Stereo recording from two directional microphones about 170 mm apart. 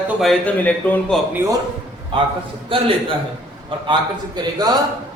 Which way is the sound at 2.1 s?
30° right (ahead or behind).